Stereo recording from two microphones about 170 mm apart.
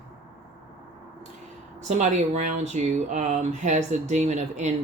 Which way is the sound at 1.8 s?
45° right (ahead or behind).